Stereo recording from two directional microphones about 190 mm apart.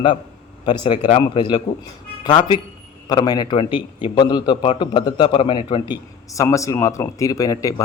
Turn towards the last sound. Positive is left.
turn(degrees=20)  # may be behind; listen again after turning